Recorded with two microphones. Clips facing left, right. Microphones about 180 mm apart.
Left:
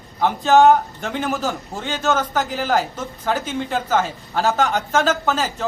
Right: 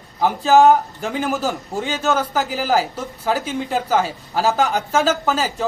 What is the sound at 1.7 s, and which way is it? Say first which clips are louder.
Speech: right 1 dB; 10° right (ahead or behind).